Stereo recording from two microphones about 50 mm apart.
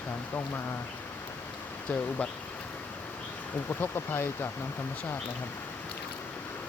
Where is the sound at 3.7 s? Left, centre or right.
Left.